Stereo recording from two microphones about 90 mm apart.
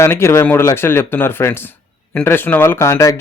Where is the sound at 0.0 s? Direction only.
30° left (ahead or behind).